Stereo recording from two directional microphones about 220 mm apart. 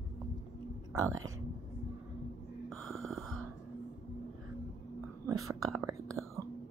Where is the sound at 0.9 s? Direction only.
15° right (ahead or behind).